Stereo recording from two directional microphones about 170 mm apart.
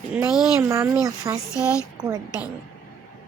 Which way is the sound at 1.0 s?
20° right (ahead or behind).